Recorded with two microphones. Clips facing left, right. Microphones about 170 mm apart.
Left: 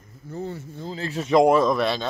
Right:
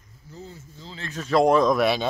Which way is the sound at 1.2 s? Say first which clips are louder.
Left 2 dB; 15° left (ahead or behind).